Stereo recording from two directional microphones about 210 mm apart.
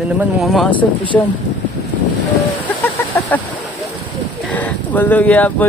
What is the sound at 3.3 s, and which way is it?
Speech, 10° left (ahead or behind).